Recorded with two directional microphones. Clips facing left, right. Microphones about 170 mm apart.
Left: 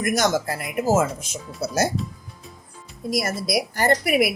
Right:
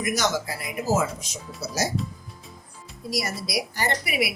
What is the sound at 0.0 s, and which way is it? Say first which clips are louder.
Speech: left 4 dB; 50° left (ahead or behind).